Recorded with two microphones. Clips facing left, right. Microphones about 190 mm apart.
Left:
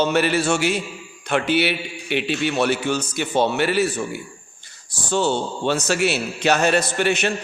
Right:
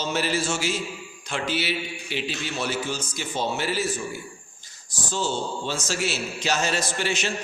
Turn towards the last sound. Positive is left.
turn(degrees=60)  # may be behind; listen again after turning